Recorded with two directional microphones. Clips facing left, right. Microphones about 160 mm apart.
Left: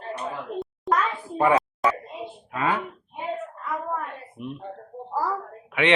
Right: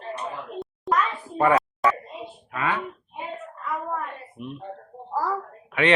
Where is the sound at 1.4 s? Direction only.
20° left (ahead or behind).